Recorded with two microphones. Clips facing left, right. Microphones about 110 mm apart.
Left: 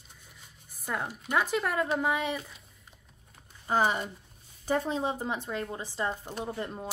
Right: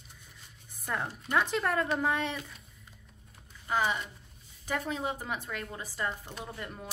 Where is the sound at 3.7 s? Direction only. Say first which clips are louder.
Left 3 dB; 40° left (ahead or behind).